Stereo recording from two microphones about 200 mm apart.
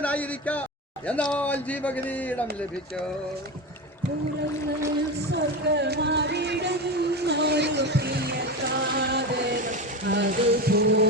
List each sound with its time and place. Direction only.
0.0 s speech: 5° left (ahead or behind)
5.3 s music: 55° right (ahead or behind)
10.1 s a sound: 55° right (ahead or behind)